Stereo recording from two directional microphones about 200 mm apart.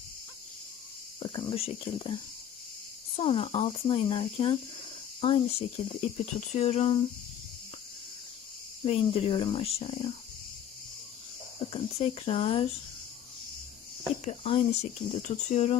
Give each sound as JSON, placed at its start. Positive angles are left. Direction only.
{"t": 1.2, "sound": "speech", "side_deg": 25}
{"t": 3.2, "sound": "speech", "side_deg": 30}
{"t": 8.8, "sound": "speech", "side_deg": 30}
{"t": 11.7, "sound": "speech", "side_deg": 30}
{"t": 14.3, "sound": "speech", "side_deg": 30}